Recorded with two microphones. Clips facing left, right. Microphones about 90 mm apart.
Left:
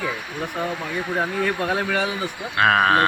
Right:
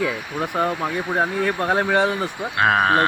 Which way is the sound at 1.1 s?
30° right (ahead or behind).